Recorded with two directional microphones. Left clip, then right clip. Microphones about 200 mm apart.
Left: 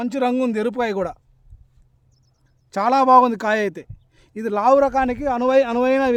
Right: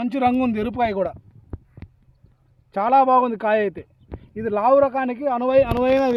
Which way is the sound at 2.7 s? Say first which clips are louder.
Left 2 dB; 40° left (ahead or behind).